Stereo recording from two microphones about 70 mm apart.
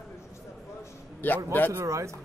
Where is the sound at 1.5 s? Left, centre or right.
Left.